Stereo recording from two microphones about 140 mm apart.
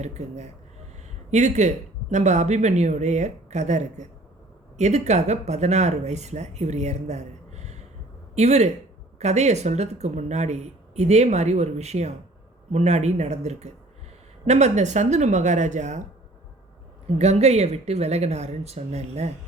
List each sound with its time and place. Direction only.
0.0 s speech: 55° right (ahead or behind)
17.2 s speech: 50° right (ahead or behind)